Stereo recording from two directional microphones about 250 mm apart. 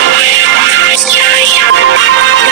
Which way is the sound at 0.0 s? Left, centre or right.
Right.